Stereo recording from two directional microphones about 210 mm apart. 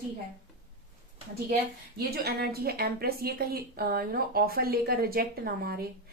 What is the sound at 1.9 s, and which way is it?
Speech, 50° right (ahead or behind).